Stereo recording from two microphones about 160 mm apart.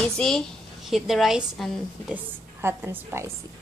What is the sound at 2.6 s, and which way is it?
Speech, 15° right (ahead or behind).